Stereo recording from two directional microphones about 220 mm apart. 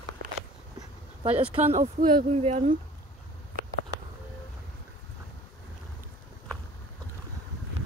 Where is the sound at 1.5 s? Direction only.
30° right (ahead or behind).